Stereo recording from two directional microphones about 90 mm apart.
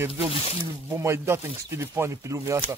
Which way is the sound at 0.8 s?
30° right (ahead or behind).